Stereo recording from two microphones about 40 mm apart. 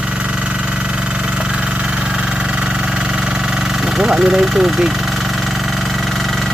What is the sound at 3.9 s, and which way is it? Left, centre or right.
Speech, centre.